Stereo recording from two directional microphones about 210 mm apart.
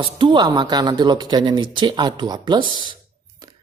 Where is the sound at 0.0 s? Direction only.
20° right (ahead or behind).